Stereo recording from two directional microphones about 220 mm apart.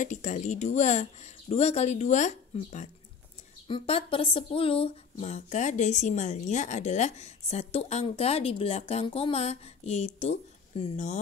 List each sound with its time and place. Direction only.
0.0 s speech: 35° left (ahead or behind)